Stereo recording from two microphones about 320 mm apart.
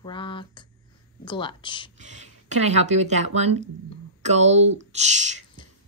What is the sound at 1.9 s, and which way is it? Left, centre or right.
Speech, right.